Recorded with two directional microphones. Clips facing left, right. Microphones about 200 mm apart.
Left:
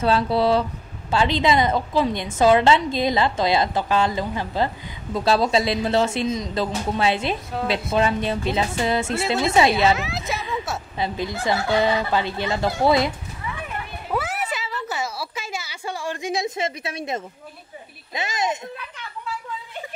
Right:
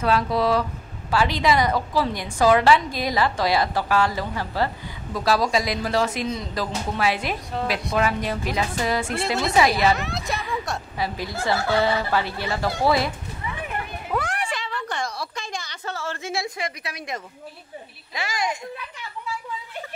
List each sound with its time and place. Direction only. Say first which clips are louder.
0.0 s a woman's voice: left 2 dB; 30° left (ahead or behind)
9.7 s speech: left 2 dB; centre (ahead or behind)
11.0 s a woman's voice: left 3 dB; 20° left (ahead or behind)
14.1 s a sound: left 1 dB; 5° left (ahead or behind); by 17.2 s 25° left (ahead or behind)
18.1 s a woman's voice: left 2 dB; 20° left (ahead or behind)